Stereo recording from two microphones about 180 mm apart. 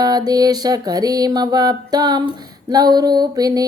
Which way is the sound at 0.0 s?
20° right (ahead or behind).